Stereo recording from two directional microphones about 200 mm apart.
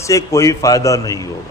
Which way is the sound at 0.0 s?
15° left (ahead or behind).